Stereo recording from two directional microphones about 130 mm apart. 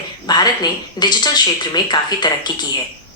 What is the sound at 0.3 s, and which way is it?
A woman's voice, 30° left (ahead or behind).